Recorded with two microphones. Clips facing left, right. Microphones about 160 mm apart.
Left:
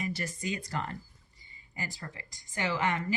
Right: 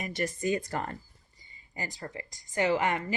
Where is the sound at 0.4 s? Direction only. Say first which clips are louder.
Right 4 dB; 40° right (ahead or behind).